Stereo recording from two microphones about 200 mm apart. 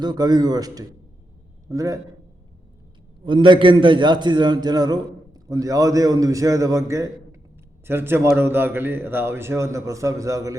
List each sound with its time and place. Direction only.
0.0 s a man's voice: 20° right (ahead or behind)
3.2 s a man's voice: 25° right (ahead or behind)